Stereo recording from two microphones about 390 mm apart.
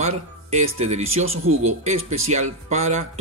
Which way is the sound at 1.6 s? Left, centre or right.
Centre.